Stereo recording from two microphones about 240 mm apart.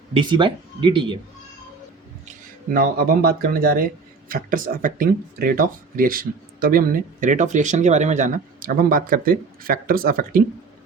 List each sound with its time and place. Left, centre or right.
0.1 s speech: centre
2.7 s speech: right